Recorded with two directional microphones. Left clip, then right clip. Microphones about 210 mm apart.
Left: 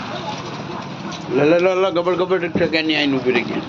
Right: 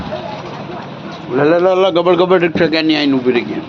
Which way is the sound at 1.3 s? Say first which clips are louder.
Right 4 dB; 10° right (ahead or behind).